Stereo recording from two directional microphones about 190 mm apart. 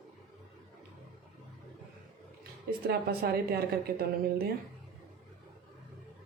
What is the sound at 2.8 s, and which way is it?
Speech, 55° right (ahead or behind).